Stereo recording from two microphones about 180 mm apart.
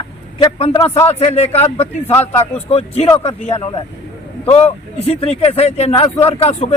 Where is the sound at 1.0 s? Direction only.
35° left (ahead or behind).